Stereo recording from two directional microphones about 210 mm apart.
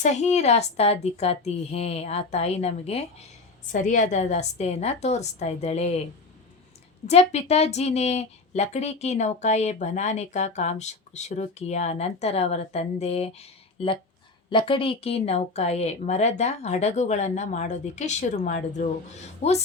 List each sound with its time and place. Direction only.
0.0 s a woman's voice: 35° left (ahead or behind)
7.1 s a woman's voice: 30° left (ahead or behind)